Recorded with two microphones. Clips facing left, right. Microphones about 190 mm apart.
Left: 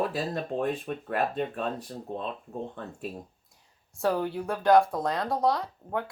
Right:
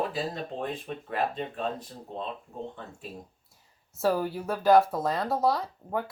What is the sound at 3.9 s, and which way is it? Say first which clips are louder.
Speech: right 1 dB; 5° right (ahead or behind).